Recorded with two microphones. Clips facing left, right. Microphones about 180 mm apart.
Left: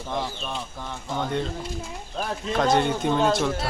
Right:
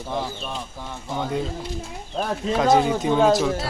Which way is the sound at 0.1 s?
5° right (ahead or behind).